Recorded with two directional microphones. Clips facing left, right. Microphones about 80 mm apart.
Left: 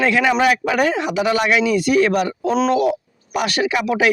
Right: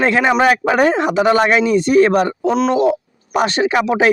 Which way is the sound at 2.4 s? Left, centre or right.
Centre.